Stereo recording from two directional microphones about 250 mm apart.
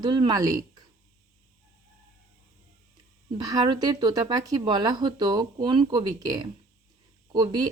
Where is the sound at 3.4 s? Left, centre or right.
Centre.